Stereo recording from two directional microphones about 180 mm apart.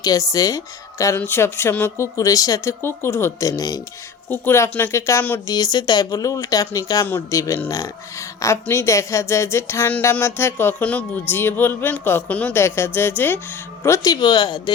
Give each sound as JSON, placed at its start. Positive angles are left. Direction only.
{"t": 0.0, "sound": "speech", "side_deg": 20}